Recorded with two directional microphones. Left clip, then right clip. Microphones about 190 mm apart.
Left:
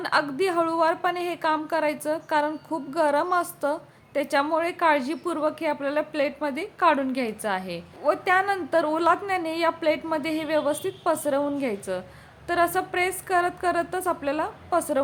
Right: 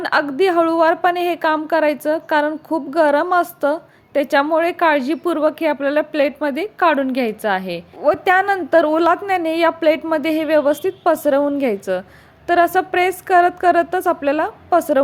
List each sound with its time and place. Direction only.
0.0 s a woman's voice: 25° right (ahead or behind)